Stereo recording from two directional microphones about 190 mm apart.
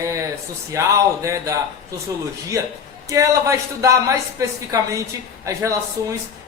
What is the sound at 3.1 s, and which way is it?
A woman's voice, 15° right (ahead or behind).